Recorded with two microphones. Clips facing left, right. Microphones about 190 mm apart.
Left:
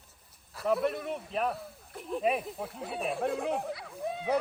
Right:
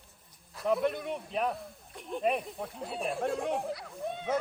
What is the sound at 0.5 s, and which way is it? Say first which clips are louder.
Speech: even; centre (ahead or behind).